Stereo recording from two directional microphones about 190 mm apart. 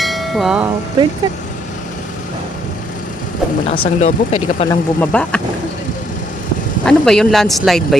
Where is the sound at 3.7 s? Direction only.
35° left (ahead or behind).